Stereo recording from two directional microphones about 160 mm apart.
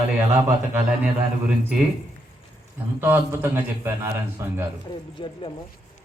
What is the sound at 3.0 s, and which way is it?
A man's voice, 15° right (ahead or behind).